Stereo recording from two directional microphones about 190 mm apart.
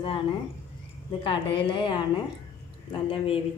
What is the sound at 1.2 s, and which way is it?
Speech, 25° left (ahead or behind).